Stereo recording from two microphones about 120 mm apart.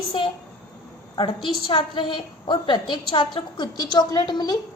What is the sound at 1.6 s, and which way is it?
A woman's voice, 45° left (ahead or behind).